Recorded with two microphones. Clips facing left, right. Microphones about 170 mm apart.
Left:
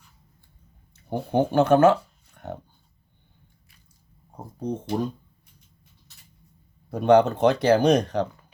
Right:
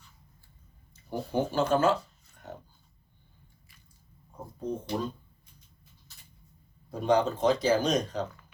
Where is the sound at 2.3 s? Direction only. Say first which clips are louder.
Left 8 dB; 65° left (ahead or behind).